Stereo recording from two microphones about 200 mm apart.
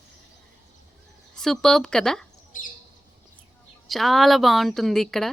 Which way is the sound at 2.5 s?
40° left (ahead or behind).